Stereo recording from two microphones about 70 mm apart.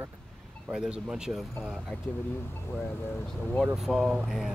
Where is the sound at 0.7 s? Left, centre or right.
Centre.